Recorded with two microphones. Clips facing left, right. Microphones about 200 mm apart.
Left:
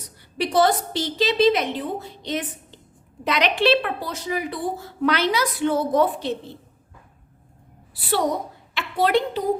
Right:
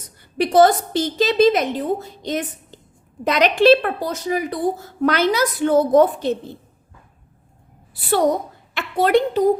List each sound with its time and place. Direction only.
0.2 s a woman's voice: 50° right (ahead or behind)
8.7 s a woman's voice: 50° right (ahead or behind)